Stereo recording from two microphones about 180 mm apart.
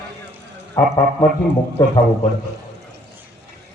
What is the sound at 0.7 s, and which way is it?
Speech, 20° left (ahead or behind).